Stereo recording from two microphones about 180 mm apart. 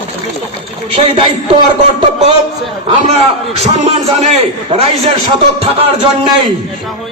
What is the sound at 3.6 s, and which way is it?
Speech, 35° right (ahead or behind).